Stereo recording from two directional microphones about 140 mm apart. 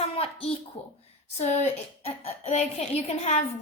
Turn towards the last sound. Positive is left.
turn(degrees=50)  # may be behind; listen again after turning